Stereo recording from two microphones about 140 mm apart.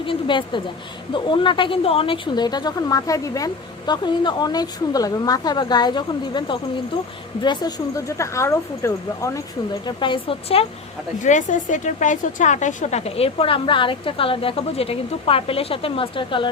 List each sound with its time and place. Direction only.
0.0 s a woman's voice: 35° left (ahead or behind); by 9.4 s 20° left (ahead or behind)
9.8 s a woman's voice: 35° left (ahead or behind)
11.2 s a woman's voice: 60° left (ahead or behind); by 16.5 s 35° left (ahead or behind)